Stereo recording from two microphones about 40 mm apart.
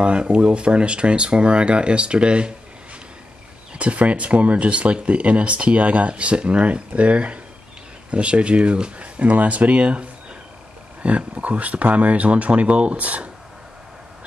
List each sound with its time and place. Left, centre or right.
0.0 s speech: right
3.7 s speech: right